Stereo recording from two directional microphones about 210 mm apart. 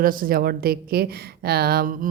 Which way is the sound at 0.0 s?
40° right (ahead or behind).